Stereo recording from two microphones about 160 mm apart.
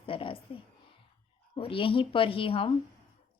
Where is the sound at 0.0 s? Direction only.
35° left (ahead or behind).